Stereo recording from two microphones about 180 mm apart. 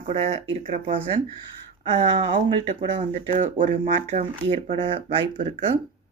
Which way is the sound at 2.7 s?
40° right (ahead or behind).